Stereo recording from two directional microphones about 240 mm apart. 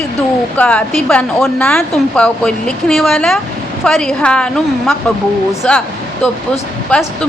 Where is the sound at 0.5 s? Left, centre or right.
Centre.